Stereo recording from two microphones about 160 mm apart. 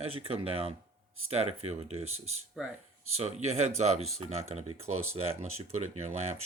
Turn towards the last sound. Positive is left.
turn(degrees=-40)  # may be behind; listen again after turning